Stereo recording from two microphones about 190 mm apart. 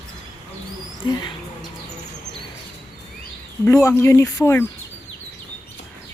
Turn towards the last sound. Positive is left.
turn(degrees=15)  # may be behind; listen again after turning